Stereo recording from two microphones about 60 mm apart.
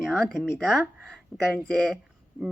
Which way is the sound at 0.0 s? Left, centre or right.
Centre.